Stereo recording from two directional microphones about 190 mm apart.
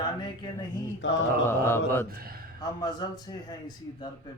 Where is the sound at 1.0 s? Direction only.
70° left (ahead or behind).